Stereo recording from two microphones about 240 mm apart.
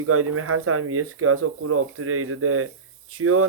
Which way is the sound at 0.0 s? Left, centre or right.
Right.